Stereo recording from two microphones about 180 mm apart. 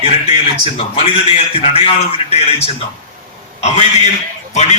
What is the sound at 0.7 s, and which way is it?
A man's voice, 35° left (ahead or behind).